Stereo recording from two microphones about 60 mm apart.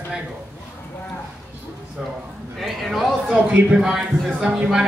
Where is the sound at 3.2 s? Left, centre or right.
Right.